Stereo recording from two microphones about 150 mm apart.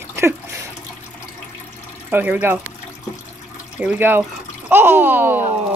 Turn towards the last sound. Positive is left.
turn(degrees=-15)  # may be behind; listen again after turning